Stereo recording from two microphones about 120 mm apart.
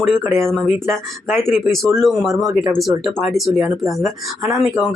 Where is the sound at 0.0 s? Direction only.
5° left (ahead or behind).